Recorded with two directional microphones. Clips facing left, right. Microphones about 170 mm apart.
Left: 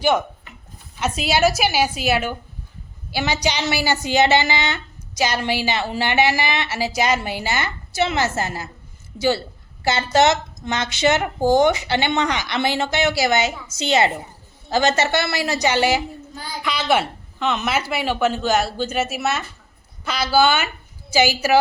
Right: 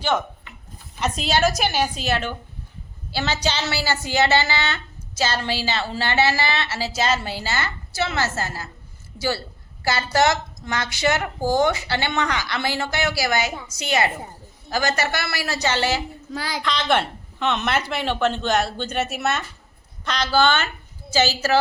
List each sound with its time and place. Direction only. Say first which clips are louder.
0.9 s a woman's voice: left 1 dB; 5° left (ahead or behind)
16.3 s a woman's voice: right 4 dB; 90° right
16.6 s a woman's voice: left 2 dB; 5° left (ahead or behind)